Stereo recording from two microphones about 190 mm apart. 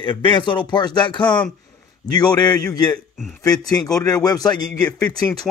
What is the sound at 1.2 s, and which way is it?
Speech, 5° left (ahead or behind).